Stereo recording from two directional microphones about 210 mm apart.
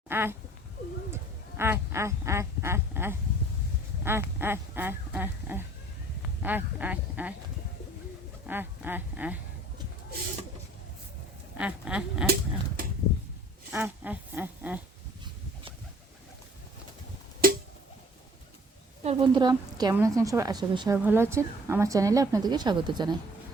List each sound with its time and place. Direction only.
0.1 s speech: 10° right (ahead or behind)
1.1 s quack: 10° right (ahead or behind)
4.0 s a woman's voice: 10° right (ahead or behind)
8.4 s a woman's voice: 10° right (ahead or behind)
11.5 s a sound: 5° right (ahead or behind)
12.2 s speech: 50° right (ahead or behind)
13.7 s a woman's voice: 10° right (ahead or behind)
17.4 s a sound: 45° right (ahead or behind)
19.0 s a woman's voice: 20° right (ahead or behind)